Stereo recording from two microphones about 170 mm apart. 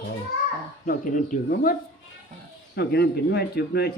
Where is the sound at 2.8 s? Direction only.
75° left (ahead or behind).